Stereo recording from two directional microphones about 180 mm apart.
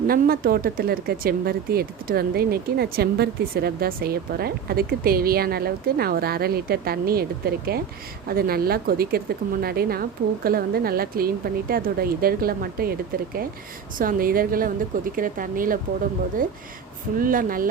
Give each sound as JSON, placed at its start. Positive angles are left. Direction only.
{"t": 0.1, "sound": "speech", "side_deg": -55}
{"t": 14.0, "sound": "a woman's voice", "side_deg": -50}